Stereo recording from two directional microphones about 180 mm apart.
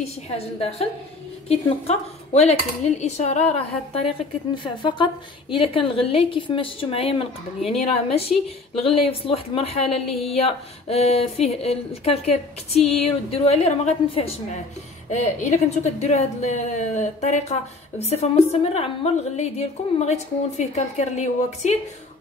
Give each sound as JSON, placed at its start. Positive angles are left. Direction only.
{"t": 0.6, "sound": "a woman's voice", "side_deg": 35}